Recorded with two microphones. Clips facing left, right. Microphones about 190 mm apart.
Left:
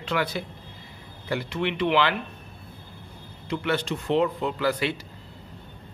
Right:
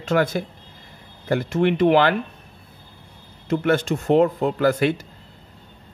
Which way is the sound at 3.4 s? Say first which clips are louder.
Right 7 dB; 45° right (ahead or behind).